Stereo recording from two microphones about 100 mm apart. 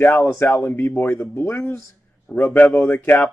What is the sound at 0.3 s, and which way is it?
Speech, 30° left (ahead or behind).